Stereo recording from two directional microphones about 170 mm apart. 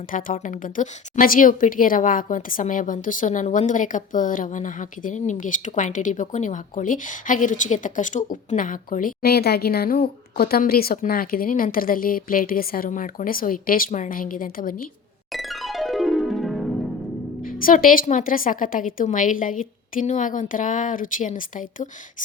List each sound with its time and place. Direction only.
0.1 s a woman's voice: 55° left (ahead or behind)
15.3 s music: centre (ahead or behind)
17.4 s a woman's voice: 55° left (ahead or behind)